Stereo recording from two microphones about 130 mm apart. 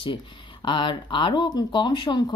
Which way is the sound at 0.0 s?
40° left (ahead or behind).